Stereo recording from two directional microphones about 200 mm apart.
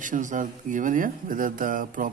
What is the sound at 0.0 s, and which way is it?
Speech, 40° right (ahead or behind).